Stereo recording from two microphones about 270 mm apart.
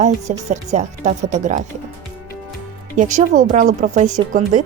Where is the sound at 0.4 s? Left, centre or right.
Right.